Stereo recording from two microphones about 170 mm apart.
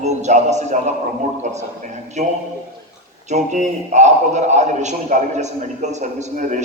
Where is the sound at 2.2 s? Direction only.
45° right (ahead or behind).